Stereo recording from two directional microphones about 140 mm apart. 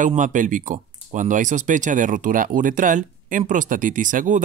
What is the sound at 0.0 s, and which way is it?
Speech, 65° right (ahead or behind).